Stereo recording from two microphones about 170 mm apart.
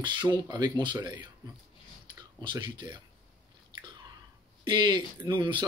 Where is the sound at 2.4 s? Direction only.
25° right (ahead or behind).